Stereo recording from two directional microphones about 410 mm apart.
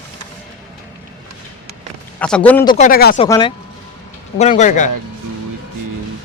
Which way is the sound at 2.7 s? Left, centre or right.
Centre.